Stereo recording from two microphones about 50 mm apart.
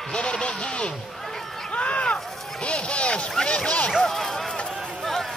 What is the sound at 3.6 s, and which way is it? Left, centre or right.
Speech, left.